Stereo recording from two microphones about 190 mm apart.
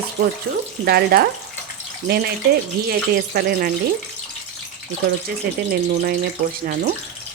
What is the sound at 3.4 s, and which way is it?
Speech, 50° right (ahead or behind).